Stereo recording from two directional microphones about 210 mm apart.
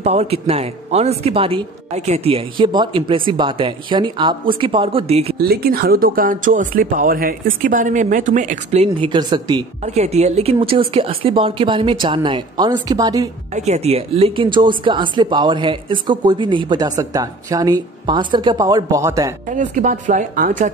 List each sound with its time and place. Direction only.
0.0 s speech: 30° right (ahead or behind)
5.4 s speech: 45° right (ahead or behind); by 9.7 s 20° right (ahead or behind)
9.8 s speech: 30° right (ahead or behind)
13.5 s speech: 30° right (ahead or behind); by 19.3 s 15° right (ahead or behind)
19.5 s speech: 35° right (ahead or behind)